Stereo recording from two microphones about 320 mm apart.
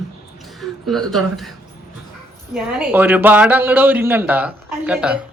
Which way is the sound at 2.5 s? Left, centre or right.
Centre.